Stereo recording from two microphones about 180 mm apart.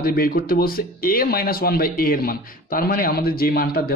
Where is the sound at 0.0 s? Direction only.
55° left (ahead or behind).